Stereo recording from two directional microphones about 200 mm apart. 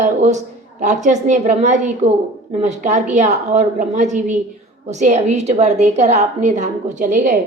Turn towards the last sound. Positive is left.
turn(degrees=-40)  # may be behind; listen again after turning